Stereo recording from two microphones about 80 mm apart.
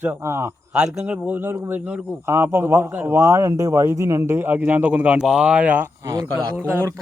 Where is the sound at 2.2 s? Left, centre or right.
Right.